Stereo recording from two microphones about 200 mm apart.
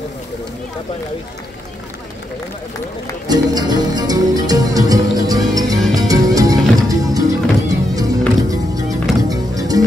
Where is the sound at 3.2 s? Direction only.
20° right (ahead or behind).